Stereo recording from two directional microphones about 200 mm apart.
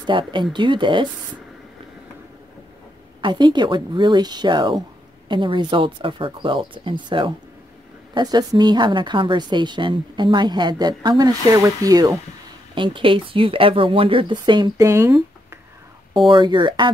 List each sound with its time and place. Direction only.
0.3 s a woman's voice: 25° right (ahead or behind)
3.2 s a woman's voice: 25° right (ahead or behind)
16.3 s a woman's voice: 25° right (ahead or behind)